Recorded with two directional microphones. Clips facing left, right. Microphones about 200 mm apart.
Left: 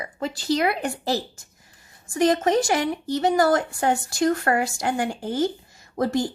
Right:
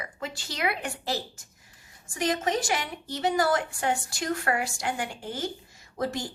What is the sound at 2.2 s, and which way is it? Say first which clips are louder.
A woman's voice: left 8 dB; 40° left (ahead or behind).